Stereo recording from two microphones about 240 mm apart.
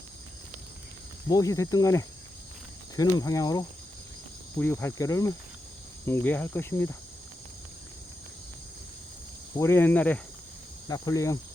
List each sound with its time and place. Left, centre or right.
1.3 s speech: centre
9.6 s speech: centre